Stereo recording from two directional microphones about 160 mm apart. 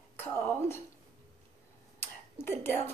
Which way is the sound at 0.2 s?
15° left (ahead or behind).